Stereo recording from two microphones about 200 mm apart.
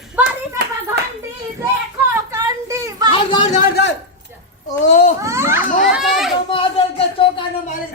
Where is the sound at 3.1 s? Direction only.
25° left (ahead or behind).